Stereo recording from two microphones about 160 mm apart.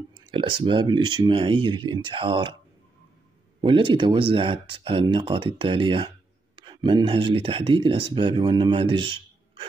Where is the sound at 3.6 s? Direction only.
30° right (ahead or behind).